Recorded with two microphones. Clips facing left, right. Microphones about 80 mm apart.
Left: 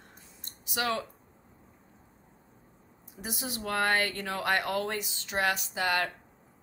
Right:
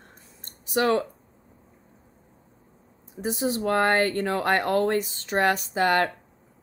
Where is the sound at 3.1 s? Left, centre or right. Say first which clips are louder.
Right 11 dB; right.